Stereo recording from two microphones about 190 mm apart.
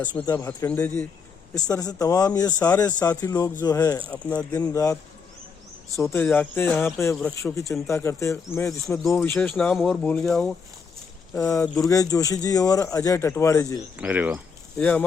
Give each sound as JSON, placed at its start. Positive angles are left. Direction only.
{"t": 0.3, "sound": "speech", "side_deg": 20}
{"t": 1.5, "sound": "speech", "side_deg": 20}
{"t": 2.6, "sound": "speech", "side_deg": 10}
{"t": 3.0, "sound": "speech", "side_deg": 20}
{"t": 4.1, "sound": "speech", "side_deg": 10}
{"t": 6.0, "sound": "speech", "side_deg": 10}
{"t": 11.3, "sound": "speech", "side_deg": 15}
{"t": 14.0, "sound": "speech", "side_deg": -5}
{"t": 14.8, "sound": "speech", "side_deg": 5}